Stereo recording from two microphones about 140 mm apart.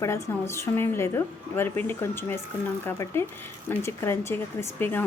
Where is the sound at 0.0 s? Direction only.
20° left (ahead or behind).